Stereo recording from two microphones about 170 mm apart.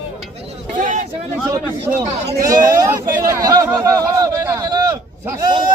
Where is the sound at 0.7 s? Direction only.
50° right (ahead or behind).